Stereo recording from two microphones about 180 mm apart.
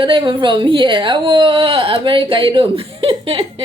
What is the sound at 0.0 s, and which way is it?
Speech, 25° right (ahead or behind).